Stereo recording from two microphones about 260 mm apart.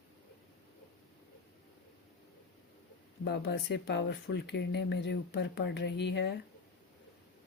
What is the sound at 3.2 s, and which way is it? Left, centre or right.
Speech, left.